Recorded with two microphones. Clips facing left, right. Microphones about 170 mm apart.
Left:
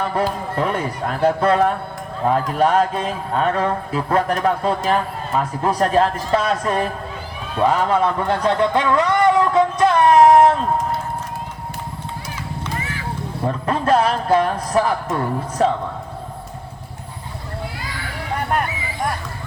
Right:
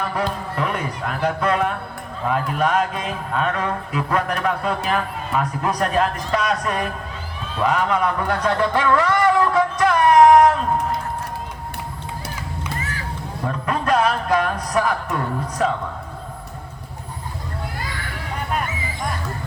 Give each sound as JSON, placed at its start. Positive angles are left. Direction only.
{"t": 0.1, "sound": "a man's voice", "side_deg": 35}
{"t": 7.6, "sound": "a sound", "side_deg": 30}
{"t": 13.5, "sound": "a man's voice", "side_deg": 30}